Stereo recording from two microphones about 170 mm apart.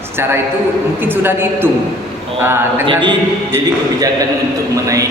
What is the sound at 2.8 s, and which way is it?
Speech, 30° right (ahead or behind).